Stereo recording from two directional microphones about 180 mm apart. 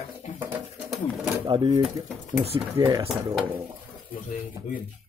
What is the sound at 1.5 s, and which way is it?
Speech, 25° right (ahead or behind).